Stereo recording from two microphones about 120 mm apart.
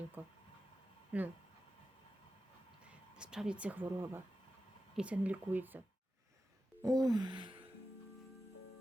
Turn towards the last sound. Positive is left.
turn(degrees=-40)  # may be behind; listen again after turning